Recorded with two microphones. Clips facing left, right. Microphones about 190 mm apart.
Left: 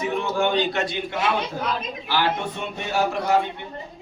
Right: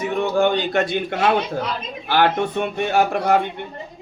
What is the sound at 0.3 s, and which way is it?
A man's voice, 50° right (ahead or behind).